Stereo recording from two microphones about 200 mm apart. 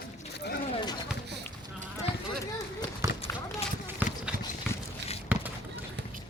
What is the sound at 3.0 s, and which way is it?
Run, 15° right (ahead or behind).